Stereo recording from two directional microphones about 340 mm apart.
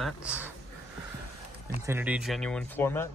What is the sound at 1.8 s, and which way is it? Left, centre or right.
Speech, centre.